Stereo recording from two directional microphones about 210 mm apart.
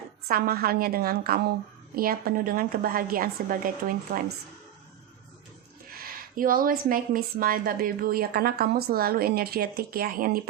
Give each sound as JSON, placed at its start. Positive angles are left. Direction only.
{"t": 0.3, "sound": "speech", "side_deg": -45}
{"t": 5.9, "sound": "speech", "side_deg": -45}